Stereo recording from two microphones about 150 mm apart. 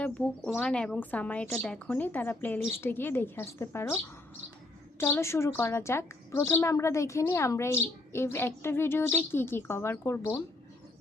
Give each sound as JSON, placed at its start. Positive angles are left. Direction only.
{"t": 0.0, "sound": "a woman's voice", "side_deg": 10}
{"t": 4.9, "sound": "a woman's voice", "side_deg": 15}